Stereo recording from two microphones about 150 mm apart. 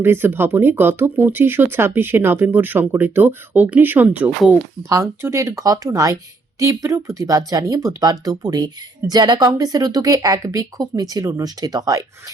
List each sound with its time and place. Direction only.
0.0 s speech: 15° right (ahead or behind)
4.9 s speech: 20° right (ahead or behind)